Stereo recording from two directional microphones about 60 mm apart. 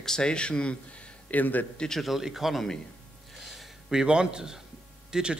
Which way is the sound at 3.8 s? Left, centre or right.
Centre.